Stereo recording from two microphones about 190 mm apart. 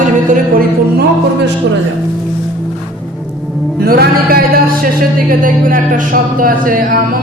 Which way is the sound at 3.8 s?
55° right (ahead or behind).